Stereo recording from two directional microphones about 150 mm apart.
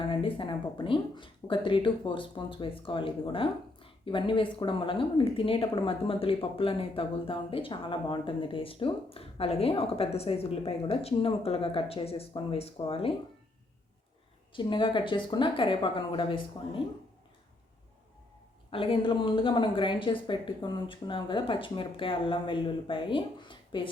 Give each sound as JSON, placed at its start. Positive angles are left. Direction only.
{"t": 0.0, "sound": "speech", "side_deg": 35}
{"t": 14.5, "sound": "speech", "side_deg": 35}
{"t": 18.7, "sound": "speech", "side_deg": 35}